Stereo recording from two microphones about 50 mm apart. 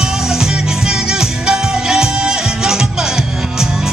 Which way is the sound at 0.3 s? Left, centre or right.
Centre.